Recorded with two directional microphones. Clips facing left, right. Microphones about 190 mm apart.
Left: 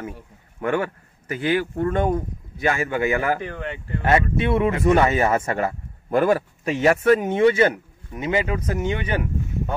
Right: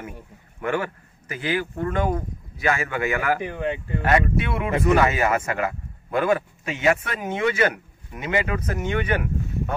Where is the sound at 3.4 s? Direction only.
15° right (ahead or behind).